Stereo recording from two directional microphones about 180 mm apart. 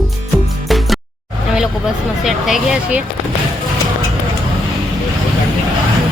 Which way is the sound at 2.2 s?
Centre (ahead or behind).